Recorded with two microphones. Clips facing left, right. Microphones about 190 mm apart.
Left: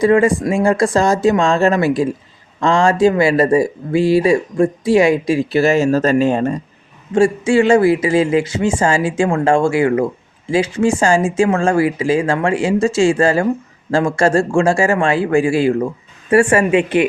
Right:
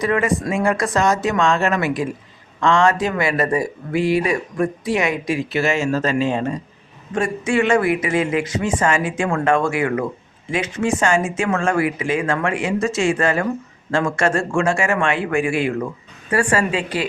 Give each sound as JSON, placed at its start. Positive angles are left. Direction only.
{"t": 0.0, "sound": "speech", "side_deg": 30}
{"t": 7.1, "sound": "speech", "side_deg": 30}